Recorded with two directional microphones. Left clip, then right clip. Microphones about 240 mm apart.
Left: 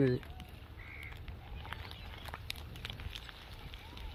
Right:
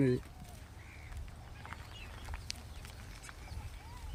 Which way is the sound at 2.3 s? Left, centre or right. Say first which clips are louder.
Left 2 dB; left.